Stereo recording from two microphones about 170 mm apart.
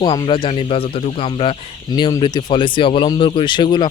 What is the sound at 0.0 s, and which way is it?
Speech, 25° left (ahead or behind).